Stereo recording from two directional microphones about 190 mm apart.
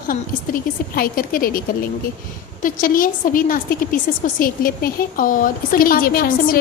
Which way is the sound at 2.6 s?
45° left (ahead or behind).